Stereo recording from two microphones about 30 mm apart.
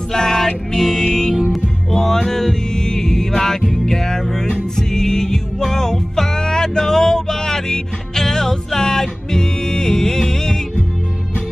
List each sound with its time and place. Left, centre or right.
0.1 s music: centre